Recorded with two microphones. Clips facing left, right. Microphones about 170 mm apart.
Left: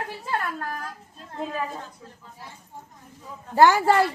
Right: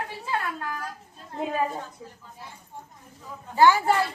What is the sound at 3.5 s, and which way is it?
Speech, 75° left (ahead or behind).